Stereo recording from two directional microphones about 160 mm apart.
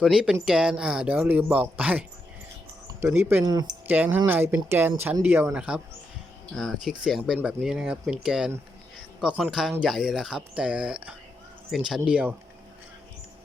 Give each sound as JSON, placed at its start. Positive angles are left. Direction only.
{"t": 0.0, "sound": "speech", "side_deg": -5}
{"t": 3.1, "sound": "speech", "side_deg": -15}
{"t": 3.4, "sound": "speech", "side_deg": -25}
{"t": 3.8, "sound": "speech", "side_deg": -10}